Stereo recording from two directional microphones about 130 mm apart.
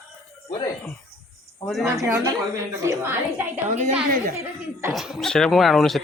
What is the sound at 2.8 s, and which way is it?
Speech, 15° right (ahead or behind).